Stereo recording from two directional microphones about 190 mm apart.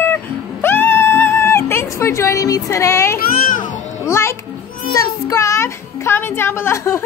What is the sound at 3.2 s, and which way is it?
Speech, 45° left (ahead or behind).